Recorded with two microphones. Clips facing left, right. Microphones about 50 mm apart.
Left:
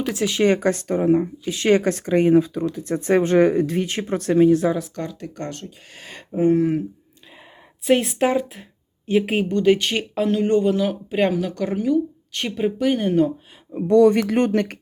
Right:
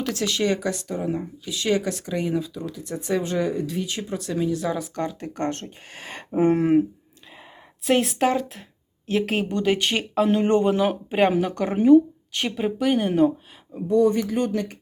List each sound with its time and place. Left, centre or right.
0.0 s speech: centre
0.4 s speech: left
4.7 s speech: centre
5.4 s speech: right
6.4 s speech: right
7.9 s speech: centre
9.6 s speech: centre
10.2 s speech: centre
12.3 s speech: centre
13.8 s speech: left